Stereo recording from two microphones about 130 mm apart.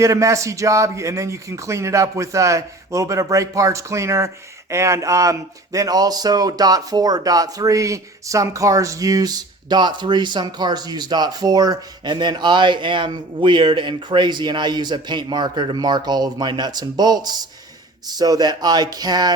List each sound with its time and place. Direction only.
0.0 s speech: 25° right (ahead or behind)